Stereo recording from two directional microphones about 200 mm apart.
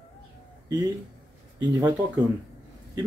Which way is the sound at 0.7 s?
20° right (ahead or behind).